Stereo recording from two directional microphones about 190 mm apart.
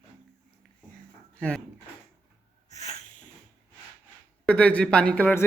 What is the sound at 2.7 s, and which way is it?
Snort, 35° left (ahead or behind).